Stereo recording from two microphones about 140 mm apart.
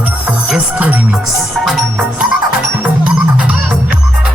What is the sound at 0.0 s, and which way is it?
Music, 10° right (ahead or behind).